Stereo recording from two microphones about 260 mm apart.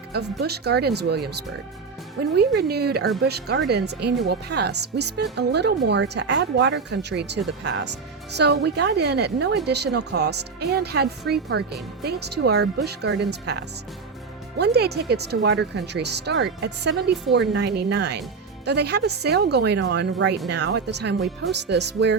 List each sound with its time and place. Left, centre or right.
0.1 s speech: right